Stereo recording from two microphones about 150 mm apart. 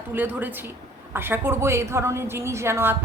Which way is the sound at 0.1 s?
15° right (ahead or behind).